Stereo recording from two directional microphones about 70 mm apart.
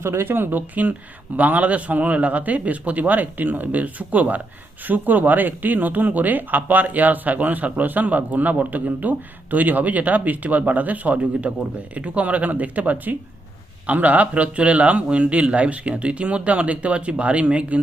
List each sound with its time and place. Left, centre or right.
0.0 s a man's voice: right; by 17.7 s centre